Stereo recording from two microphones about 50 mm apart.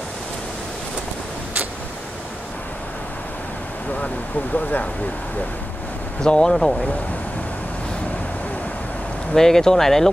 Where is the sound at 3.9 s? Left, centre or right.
Left.